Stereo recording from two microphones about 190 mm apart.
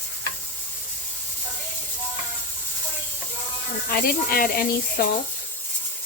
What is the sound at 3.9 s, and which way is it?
Speech, 50° left (ahead or behind).